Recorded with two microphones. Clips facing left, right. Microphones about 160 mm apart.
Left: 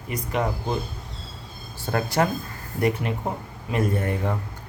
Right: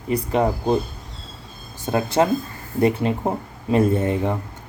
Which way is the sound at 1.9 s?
20° right (ahead or behind).